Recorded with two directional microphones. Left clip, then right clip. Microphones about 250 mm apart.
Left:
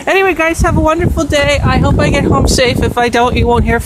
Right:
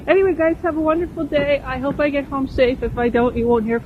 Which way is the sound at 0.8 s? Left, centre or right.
Left.